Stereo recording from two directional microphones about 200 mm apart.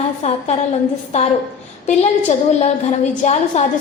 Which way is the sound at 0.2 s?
35° left (ahead or behind).